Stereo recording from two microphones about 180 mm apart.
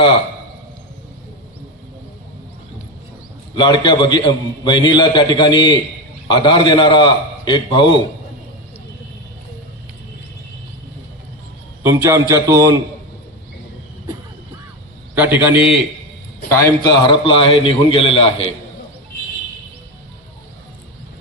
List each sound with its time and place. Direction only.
3.5 s a man's voice: 25° left (ahead or behind)
11.8 s a man's voice: 15° right (ahead or behind)
15.1 s a man's voice: 10° right (ahead or behind)
16.5 s a man's voice: 20° left (ahead or behind)